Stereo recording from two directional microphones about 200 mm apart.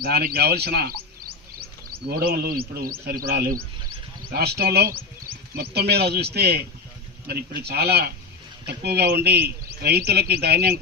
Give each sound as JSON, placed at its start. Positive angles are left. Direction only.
{"t": 0.0, "sound": "speech", "side_deg": -50}